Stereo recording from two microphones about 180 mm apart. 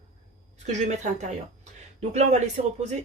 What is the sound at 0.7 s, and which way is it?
Speech, 40° right (ahead or behind).